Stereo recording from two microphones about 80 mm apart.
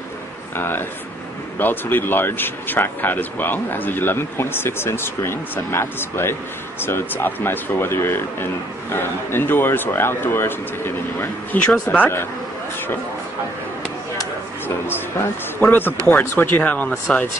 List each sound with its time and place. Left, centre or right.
0.6 s a man's voice: left
11.5 s speech: centre
11.9 s a man's voice: left
15.6 s a man's voice: left